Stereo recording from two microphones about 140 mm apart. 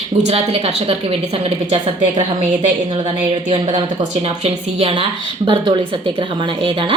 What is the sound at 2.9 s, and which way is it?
A woman's voice, 35° right (ahead or behind).